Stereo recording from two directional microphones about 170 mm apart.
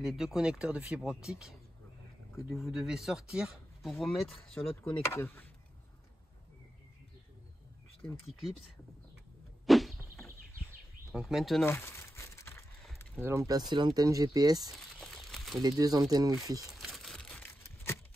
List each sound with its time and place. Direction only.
0.0 s speech: centre (ahead or behind)
5.0 s speech: 15° left (ahead or behind)
9.7 s a sound: centre (ahead or behind)
11.1 s speech: centre (ahead or behind)
11.6 s crumpling: 15° left (ahead or behind)
13.2 s speech: 15° right (ahead or behind)
14.7 s crumpling: centre (ahead or behind)
15.6 s speech: 20° right (ahead or behind)
16.6 s crumpling: centre (ahead or behind)